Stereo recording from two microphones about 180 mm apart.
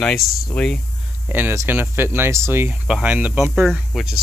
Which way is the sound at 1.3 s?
10° right (ahead or behind).